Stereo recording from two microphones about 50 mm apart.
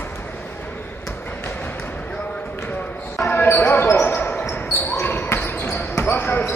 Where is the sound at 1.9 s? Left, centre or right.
Left.